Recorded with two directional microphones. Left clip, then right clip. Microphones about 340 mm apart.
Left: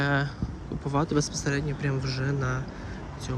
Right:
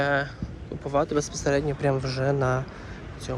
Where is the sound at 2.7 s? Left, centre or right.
Centre.